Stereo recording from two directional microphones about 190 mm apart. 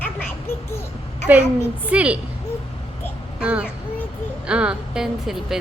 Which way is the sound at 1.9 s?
5° right (ahead or behind).